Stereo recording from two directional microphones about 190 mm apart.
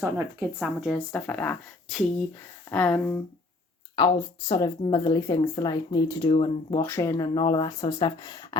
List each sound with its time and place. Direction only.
0.0 s speech: 15° right (ahead or behind)
0.6 s a woman's voice: centre (ahead or behind)
3.9 s speech: 25° left (ahead or behind)
6.8 s speech: 15° left (ahead or behind)